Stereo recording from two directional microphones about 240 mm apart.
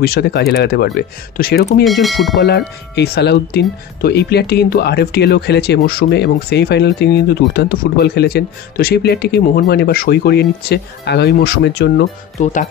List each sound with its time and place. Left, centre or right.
0.0 s speech: left
1.9 s speech: centre
2.4 s speech: left
12.4 s speech: left